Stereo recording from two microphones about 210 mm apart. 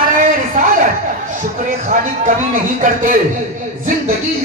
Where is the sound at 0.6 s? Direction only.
35° right (ahead or behind).